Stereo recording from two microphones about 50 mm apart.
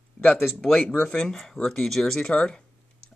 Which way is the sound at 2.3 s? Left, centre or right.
Centre.